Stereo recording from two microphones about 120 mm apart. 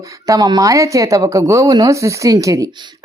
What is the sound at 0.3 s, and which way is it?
Speech, 30° right (ahead or behind).